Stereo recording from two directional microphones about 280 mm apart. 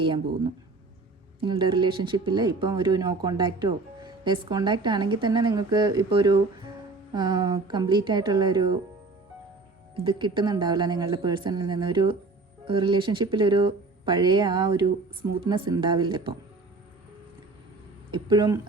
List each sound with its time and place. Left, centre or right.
1.4 s speech: centre
9.9 s speech: centre
18.1 s speech: centre